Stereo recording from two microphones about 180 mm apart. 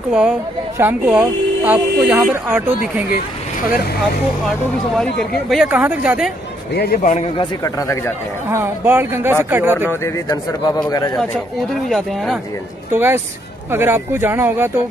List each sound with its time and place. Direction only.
0.1 s speech: 5° right (ahead or behind)
4.9 s speech: centre (ahead or behind)
6.7 s a man's voice: 60° left (ahead or behind)
7.1 s a man's voice: 40° left (ahead or behind)
7.6 s speech: 15° left (ahead or behind)
8.5 s speech: 15° right (ahead or behind)
9.8 s a man's voice: 15° left (ahead or behind)
12.9 s speech: 15° right (ahead or behind)